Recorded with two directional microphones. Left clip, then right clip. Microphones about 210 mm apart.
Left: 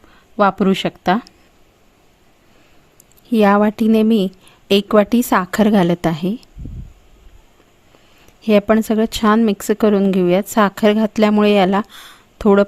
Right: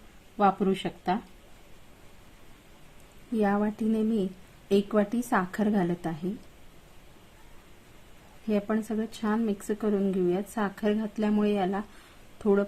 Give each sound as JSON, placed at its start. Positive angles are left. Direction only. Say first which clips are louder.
{"t": 0.3, "sound": "speech", "louder": "left 10 dB", "side_deg": 60}
{"t": 3.3, "sound": "speech", "louder": "left 14 dB", "side_deg": 50}
{"t": 8.4, "sound": "speech", "louder": "left 16 dB", "side_deg": 50}